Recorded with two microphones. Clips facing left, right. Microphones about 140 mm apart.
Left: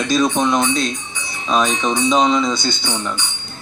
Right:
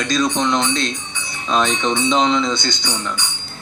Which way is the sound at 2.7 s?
20° right (ahead or behind).